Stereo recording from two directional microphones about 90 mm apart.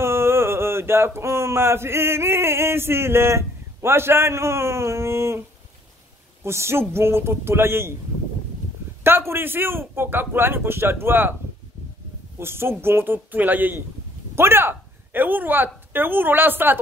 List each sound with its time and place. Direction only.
0.0 s speech: 30° right (ahead or behind)
6.4 s a man's voice: 30° right (ahead or behind)
9.0 s a man's voice: 25° right (ahead or behind)
12.4 s a man's voice: 25° right (ahead or behind)